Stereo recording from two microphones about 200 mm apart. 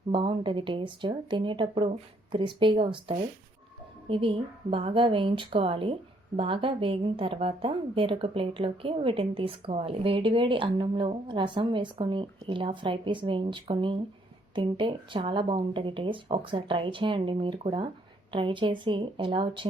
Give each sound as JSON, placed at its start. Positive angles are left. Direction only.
{"t": 0.1, "sound": "speech", "side_deg": -25}